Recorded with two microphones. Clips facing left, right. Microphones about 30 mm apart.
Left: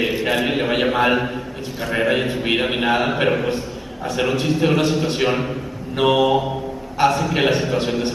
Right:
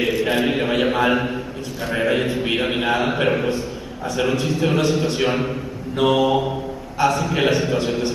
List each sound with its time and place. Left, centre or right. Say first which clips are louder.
0.0 s a sound: even; centre
0.5 s a man's voice: even; centre
4.4 s a man's voice: left 2 dB; centre
7.3 s a man's voice: even; centre